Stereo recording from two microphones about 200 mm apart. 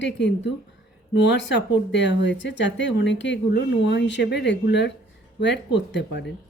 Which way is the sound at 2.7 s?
60° left (ahead or behind).